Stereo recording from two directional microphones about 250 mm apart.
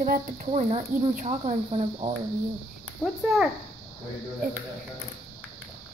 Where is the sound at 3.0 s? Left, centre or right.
Centre.